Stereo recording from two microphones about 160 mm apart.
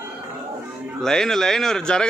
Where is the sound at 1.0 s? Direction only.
5° left (ahead or behind).